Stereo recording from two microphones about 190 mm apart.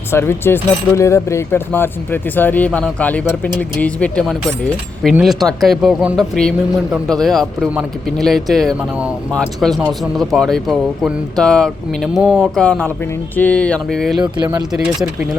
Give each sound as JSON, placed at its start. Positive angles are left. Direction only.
{"t": 0.1, "sound": "speech", "side_deg": 15}
{"t": 14.2, "sound": "speech", "side_deg": -20}